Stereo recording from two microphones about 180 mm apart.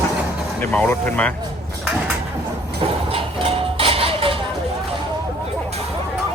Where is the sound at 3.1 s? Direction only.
30° right (ahead or behind).